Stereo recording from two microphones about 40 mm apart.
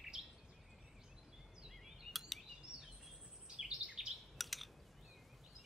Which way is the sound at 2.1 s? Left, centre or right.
Centre.